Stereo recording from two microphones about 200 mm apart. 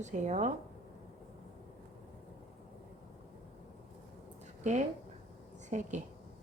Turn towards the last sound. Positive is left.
turn(degrees=-35)  # may be behind; listen again after turning